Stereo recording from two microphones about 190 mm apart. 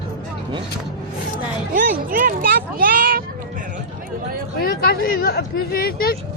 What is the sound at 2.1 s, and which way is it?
Speech, 50° right (ahead or behind).